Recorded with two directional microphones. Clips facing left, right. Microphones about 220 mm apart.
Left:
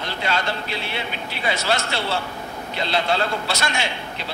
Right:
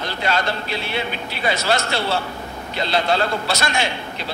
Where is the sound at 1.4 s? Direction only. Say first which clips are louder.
Right 3 dB; 40° right (ahead or behind).